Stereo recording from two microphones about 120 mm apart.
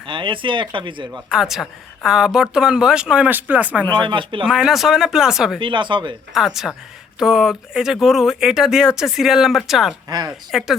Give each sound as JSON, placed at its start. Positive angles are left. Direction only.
{"t": 0.0, "sound": "speech", "side_deg": -45}
{"t": 1.1, "sound": "a woman's voice", "side_deg": -5}
{"t": 3.9, "sound": "speech", "side_deg": -45}
{"t": 4.4, "sound": "speech", "side_deg": -5}
{"t": 5.5, "sound": "speech", "side_deg": -45}
{"t": 6.3, "sound": "speech", "side_deg": -5}
{"t": 10.1, "sound": "speech", "side_deg": -35}
{"t": 10.5, "sound": "speech", "side_deg": 0}